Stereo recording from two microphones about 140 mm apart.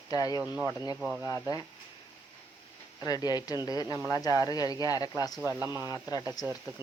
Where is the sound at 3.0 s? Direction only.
30° left (ahead or behind).